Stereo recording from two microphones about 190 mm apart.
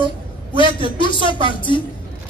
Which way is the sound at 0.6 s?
25° left (ahead or behind).